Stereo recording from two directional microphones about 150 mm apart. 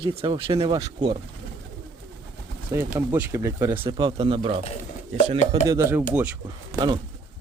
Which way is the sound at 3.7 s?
35° right (ahead or behind).